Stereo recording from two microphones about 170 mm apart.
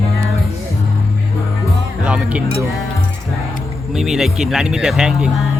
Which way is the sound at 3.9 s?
Centre (ahead or behind).